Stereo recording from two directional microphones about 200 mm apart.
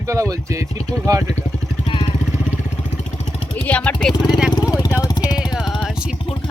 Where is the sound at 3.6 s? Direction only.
5° left (ahead or behind).